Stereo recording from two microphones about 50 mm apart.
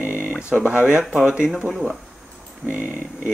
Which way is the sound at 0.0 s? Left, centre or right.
Right.